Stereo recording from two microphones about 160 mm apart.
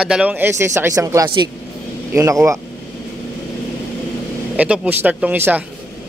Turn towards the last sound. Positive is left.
turn(degrees=-10)  # may be behind; listen again after turning